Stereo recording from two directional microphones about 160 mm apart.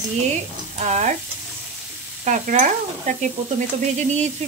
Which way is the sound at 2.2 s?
55° right (ahead or behind).